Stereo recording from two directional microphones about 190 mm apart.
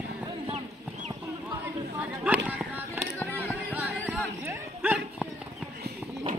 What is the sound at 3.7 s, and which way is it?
Music, 10° right (ahead or behind).